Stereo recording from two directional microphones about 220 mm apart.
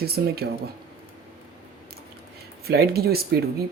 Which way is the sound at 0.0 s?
45° right (ahead or behind).